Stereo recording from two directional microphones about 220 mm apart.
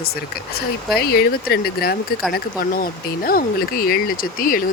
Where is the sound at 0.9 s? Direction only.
45° left (ahead or behind).